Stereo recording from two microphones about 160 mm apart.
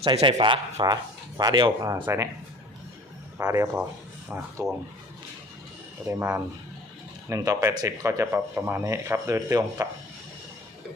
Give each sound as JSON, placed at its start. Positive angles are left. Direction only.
{"t": 0.0, "sound": "speech", "side_deg": -35}
{"t": 3.3, "sound": "speech", "side_deg": -20}
{"t": 6.1, "sound": "speech", "side_deg": -15}